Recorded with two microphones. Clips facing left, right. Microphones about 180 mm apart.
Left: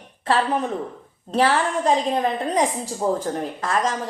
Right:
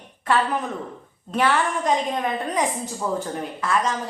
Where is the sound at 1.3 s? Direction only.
35° left (ahead or behind).